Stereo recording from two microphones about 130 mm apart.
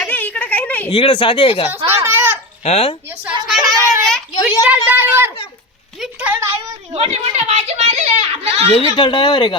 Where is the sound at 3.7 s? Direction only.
25° right (ahead or behind).